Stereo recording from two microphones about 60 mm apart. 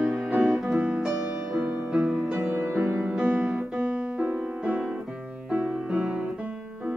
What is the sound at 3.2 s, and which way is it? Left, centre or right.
Music, right.